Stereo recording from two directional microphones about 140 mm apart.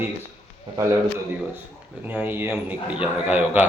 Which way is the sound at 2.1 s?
15° right (ahead or behind).